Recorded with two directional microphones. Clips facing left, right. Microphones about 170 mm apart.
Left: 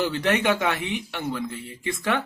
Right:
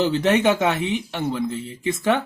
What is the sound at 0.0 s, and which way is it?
Speech, 20° right (ahead or behind).